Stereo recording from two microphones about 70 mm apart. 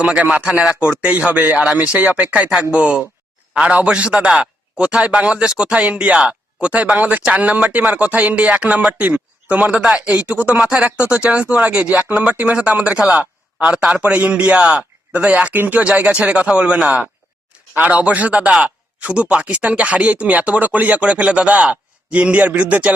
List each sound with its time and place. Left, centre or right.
0.0 s a man's voice: centre